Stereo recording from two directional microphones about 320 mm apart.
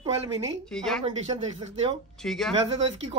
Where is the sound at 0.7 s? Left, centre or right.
Centre.